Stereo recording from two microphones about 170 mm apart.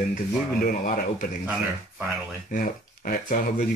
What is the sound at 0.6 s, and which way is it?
Speech, 55° left (ahead or behind).